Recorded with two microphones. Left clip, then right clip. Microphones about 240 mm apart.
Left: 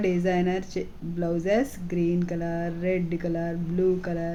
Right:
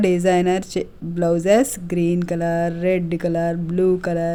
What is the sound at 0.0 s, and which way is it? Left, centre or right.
Speech, right.